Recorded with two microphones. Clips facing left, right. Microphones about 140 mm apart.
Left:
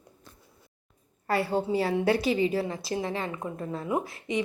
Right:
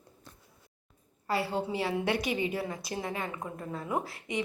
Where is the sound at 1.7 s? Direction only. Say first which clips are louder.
Left 5 dB; 40° left (ahead or behind); by 4.1 s 20° left (ahead or behind).